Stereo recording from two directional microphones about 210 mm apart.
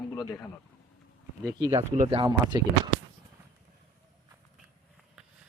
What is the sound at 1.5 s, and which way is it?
Speech, 20° right (ahead or behind).